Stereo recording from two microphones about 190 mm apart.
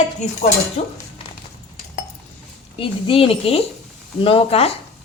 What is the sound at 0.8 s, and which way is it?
Speech, 35° left (ahead or behind).